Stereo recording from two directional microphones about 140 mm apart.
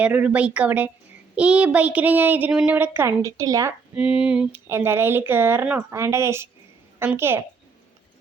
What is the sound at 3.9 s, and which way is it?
A woman's voice, 5° right (ahead or behind).